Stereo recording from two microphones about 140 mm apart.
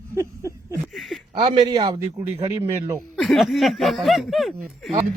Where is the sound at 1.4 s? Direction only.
35° right (ahead or behind).